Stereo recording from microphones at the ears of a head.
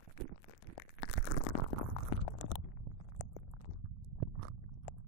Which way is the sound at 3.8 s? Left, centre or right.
Right.